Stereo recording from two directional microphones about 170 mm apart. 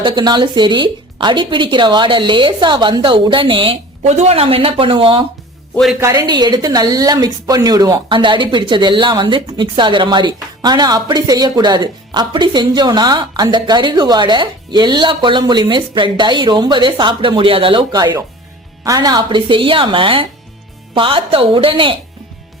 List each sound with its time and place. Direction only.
0.0 s speech: 25° right (ahead or behind)
5.7 s a man's voice: centre (ahead or behind)
6.0 s speech: 20° right (ahead or behind)